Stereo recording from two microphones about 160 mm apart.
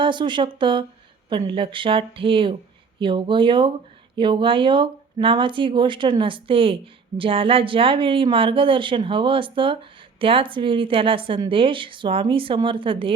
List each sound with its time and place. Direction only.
0.0 s a woman's voice: 30° right (ahead or behind)